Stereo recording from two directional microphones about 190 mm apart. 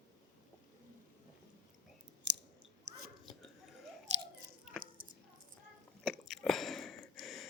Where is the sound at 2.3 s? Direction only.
65° right (ahead or behind).